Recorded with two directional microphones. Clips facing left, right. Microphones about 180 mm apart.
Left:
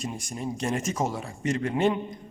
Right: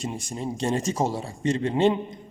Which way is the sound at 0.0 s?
25° right (ahead or behind).